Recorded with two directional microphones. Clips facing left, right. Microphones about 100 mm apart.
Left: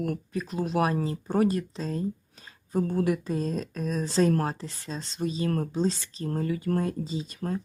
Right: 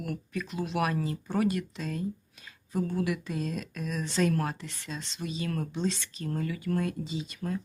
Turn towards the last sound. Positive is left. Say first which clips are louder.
# left 3 dB
turn(degrees=40)  # may be behind; listen again after turning